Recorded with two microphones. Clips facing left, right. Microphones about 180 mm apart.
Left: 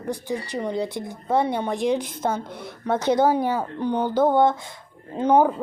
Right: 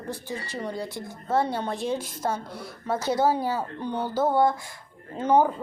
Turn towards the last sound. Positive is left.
turn(degrees=10)  # may be behind; listen again after turning